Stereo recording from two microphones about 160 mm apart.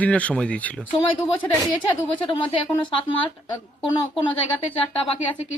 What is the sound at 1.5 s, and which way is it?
A woman's voice, 30° left (ahead or behind).